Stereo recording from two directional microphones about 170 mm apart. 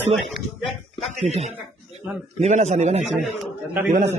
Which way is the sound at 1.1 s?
40° right (ahead or behind).